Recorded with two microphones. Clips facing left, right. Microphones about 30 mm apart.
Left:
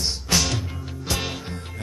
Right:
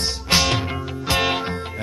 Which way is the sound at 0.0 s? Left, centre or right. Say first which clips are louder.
Right 4 dB; right.